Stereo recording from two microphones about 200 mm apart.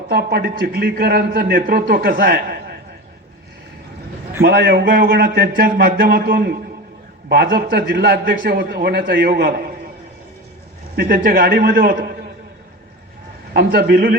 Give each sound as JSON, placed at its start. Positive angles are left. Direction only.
{"t": 0.1, "sound": "a man's voice", "side_deg": -50}
{"t": 4.4, "sound": "a man's voice", "side_deg": -55}
{"t": 10.9, "sound": "a man's voice", "side_deg": -45}
{"t": 13.5, "sound": "a man's voice", "side_deg": -50}